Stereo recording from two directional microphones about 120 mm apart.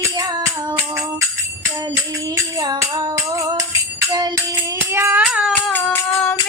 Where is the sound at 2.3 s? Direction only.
30° right (ahead or behind).